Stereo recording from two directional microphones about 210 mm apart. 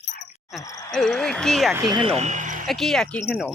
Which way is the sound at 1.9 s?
30° right (ahead or behind).